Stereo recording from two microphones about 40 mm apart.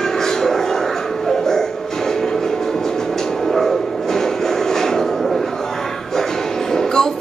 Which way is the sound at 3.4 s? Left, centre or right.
Centre.